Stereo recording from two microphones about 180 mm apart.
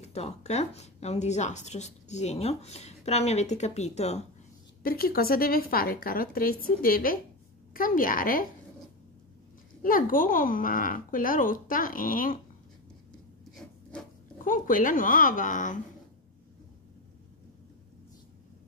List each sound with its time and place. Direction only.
0.0 s speech: 35° left (ahead or behind)
4.8 s a woman's voice: 55° left (ahead or behind)
9.8 s a child's voice: 50° left (ahead or behind)
13.6 s zipper: centre (ahead or behind)
14.4 s a child's voice: 50° left (ahead or behind)